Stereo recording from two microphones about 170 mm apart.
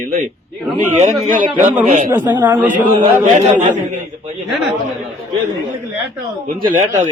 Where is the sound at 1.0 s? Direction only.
50° right (ahead or behind).